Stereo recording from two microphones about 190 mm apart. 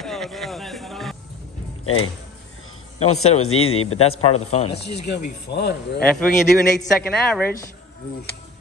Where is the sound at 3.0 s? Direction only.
35° left (ahead or behind).